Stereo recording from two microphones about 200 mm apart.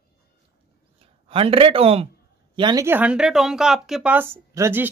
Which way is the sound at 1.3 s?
25° right (ahead or behind).